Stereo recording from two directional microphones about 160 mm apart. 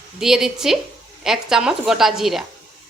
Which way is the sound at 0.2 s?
5° right (ahead or behind).